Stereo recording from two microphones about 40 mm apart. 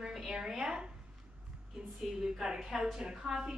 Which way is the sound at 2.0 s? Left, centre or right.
Centre.